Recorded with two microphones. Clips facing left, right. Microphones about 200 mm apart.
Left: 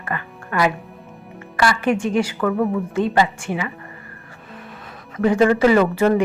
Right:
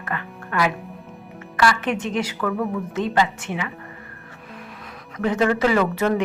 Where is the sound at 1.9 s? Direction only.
10° left (ahead or behind).